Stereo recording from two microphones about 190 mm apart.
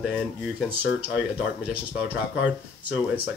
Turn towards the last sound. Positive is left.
turn(degrees=-10)  # may be behind; listen again after turning